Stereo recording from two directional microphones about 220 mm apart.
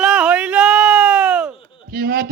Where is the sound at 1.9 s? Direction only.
40° right (ahead or behind).